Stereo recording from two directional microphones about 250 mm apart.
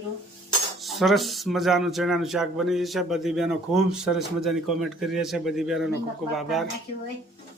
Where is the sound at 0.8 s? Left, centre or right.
Centre.